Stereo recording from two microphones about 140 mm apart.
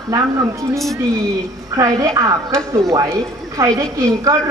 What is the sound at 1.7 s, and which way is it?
A woman's voice, 25° right (ahead or behind).